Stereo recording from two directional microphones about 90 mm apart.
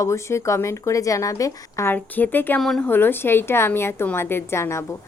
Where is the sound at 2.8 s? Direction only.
25° left (ahead or behind).